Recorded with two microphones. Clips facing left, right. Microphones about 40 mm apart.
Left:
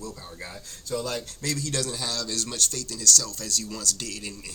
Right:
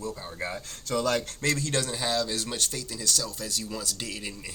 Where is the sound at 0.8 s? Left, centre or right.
Right.